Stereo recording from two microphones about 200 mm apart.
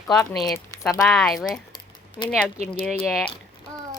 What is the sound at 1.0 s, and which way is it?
Speech, centre (ahead or behind).